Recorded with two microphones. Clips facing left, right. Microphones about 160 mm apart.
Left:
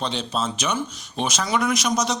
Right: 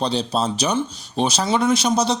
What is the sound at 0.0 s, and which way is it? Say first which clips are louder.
Speech: right 5 dB; 35° right (ahead or behind).